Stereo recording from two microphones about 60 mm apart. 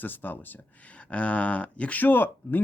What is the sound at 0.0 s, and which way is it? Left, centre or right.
Speech, left.